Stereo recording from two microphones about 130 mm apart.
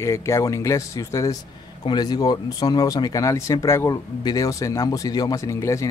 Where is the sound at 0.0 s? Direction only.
20° left (ahead or behind).